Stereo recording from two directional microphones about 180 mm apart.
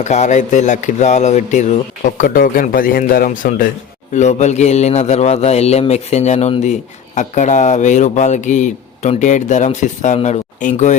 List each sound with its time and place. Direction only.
0.0 s a man's voice: 40° left (ahead or behind)